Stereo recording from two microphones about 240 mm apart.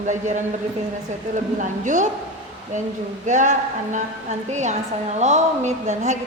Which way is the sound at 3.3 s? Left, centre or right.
Right.